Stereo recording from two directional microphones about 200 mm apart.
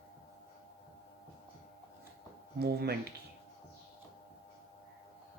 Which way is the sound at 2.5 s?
55° right (ahead or behind).